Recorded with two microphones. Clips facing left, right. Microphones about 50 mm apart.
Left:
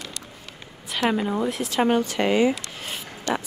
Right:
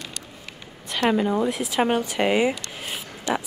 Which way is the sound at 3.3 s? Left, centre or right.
Centre.